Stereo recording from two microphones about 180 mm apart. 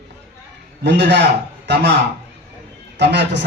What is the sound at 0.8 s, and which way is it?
Speech, 70° right (ahead or behind).